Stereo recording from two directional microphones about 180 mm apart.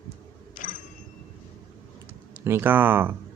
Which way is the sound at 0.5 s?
45° left (ahead or behind).